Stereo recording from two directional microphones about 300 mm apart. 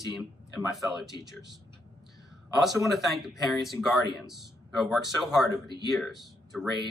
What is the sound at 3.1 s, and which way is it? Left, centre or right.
Speech, centre.